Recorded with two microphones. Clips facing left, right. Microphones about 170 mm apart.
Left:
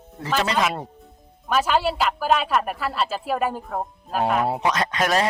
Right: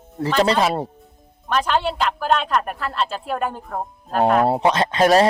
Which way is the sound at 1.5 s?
5° left (ahead or behind).